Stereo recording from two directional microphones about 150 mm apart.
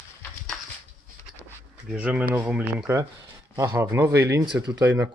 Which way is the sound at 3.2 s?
25° right (ahead or behind).